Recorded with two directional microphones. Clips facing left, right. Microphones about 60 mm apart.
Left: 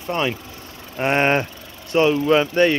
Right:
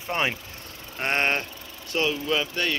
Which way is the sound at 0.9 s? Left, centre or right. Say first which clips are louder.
Left 7 dB; centre.